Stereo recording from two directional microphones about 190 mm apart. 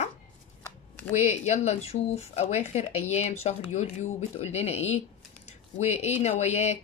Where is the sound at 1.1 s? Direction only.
35° left (ahead or behind).